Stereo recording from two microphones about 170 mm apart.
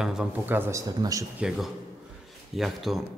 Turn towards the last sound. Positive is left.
turn(degrees=0)  # may be behind; listen again after turning